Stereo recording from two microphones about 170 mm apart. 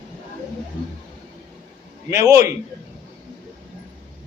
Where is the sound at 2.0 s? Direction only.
20° right (ahead or behind).